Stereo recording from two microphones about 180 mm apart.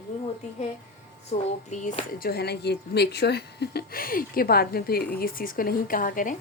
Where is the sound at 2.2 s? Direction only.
65° left (ahead or behind).